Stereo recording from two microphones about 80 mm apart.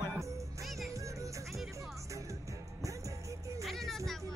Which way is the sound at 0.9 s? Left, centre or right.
Right.